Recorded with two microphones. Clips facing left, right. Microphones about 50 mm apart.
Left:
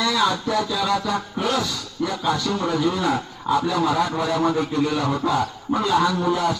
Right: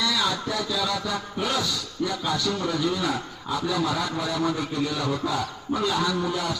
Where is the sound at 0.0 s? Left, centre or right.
Left.